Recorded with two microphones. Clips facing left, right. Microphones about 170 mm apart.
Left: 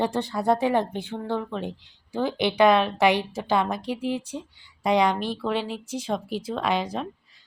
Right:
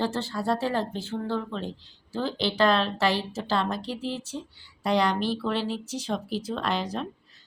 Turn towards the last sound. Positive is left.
turn(degrees=10)  # may be behind; listen again after turning